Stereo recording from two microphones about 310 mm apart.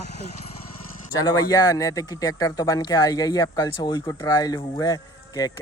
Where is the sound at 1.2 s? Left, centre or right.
Centre.